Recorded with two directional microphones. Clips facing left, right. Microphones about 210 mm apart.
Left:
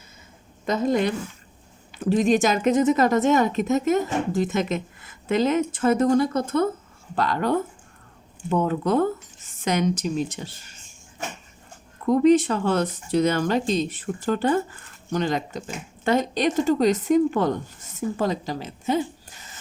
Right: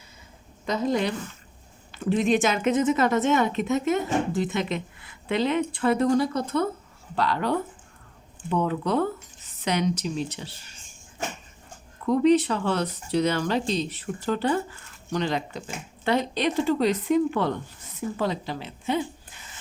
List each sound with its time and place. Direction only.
0.7 s a woman's voice: 50° left (ahead or behind)
12.0 s speech: 45° left (ahead or behind)